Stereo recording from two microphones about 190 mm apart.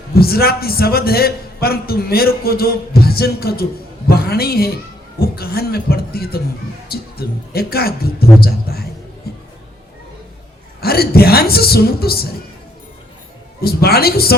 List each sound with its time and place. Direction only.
0.1 s a man's voice: 55° left (ahead or behind)
9.3 s music: 55° left (ahead or behind)
10.8 s speech: 55° left (ahead or behind)
13.6 s speech: 55° left (ahead or behind)